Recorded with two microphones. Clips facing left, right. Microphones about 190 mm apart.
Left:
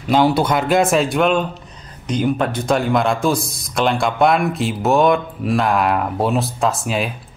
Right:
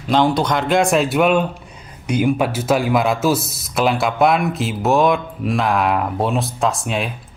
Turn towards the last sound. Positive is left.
turn(degrees=0)  # may be behind; listen again after turning